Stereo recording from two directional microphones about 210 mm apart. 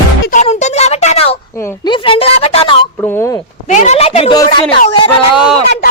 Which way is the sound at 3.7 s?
35° left (ahead or behind).